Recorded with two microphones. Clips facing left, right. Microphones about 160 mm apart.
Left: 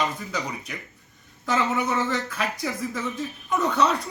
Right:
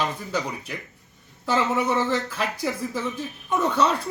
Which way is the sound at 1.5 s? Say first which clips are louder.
Right 2 dB; centre (ahead or behind).